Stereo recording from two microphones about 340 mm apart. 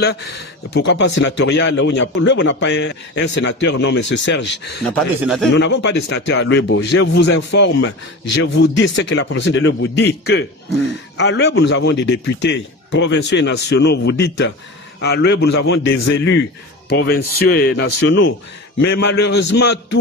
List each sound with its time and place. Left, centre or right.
0.0 s speech: left
4.8 s speech: centre
5.6 s a man's voice: left